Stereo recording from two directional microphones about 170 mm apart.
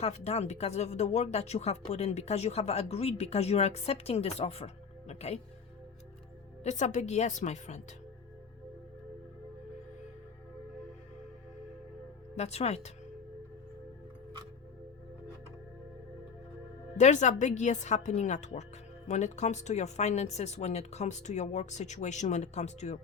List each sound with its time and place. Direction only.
0.0 s speech: 40° left (ahead or behind)
6.6 s speech: 40° left (ahead or behind)
12.4 s speech: 40° left (ahead or behind)
17.0 s speech: 45° left (ahead or behind)